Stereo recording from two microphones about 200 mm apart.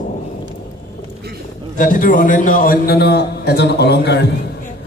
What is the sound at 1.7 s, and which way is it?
A man's voice, 40° left (ahead or behind).